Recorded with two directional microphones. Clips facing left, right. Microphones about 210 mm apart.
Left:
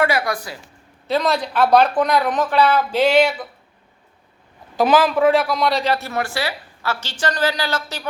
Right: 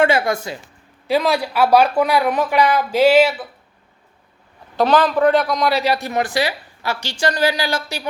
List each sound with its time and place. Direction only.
0.0 s a woman's voice: 25° right (ahead or behind)
1.0 s speech: 10° right (ahead or behind)
4.8 s speech: 5° left (ahead or behind); by 8.0 s 10° right (ahead or behind)